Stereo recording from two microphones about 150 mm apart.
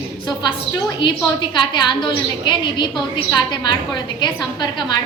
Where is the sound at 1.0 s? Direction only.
30° left (ahead or behind).